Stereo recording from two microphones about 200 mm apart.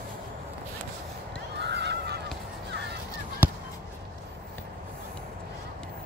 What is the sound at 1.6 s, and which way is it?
Honk, 60° right (ahead or behind).